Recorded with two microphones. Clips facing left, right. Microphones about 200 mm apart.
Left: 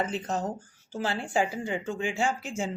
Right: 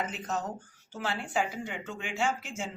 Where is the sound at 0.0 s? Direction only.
30° left (ahead or behind).